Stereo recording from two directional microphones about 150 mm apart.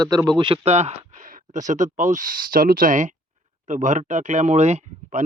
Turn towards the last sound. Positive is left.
turn(degrees=-50)  # may be behind; listen again after turning